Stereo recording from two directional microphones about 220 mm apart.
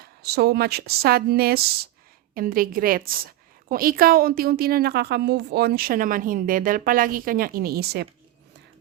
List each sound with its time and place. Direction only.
0.0 s a woman's voice: 45° right (ahead or behind)